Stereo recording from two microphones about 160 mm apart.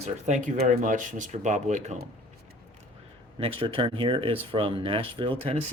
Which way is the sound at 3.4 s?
35° right (ahead or behind).